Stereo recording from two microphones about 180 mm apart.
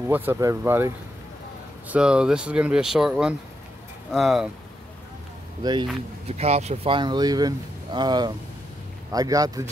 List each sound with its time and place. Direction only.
0.1 s speech: 10° right (ahead or behind)
1.9 s speech: 5° right (ahead or behind)
5.6 s speech: 25° right (ahead or behind)
6.2 s speech: 35° right (ahead or behind); by 9.7 s 20° right (ahead or behind)